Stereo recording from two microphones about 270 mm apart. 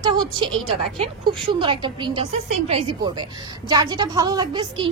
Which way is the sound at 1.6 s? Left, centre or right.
Centre.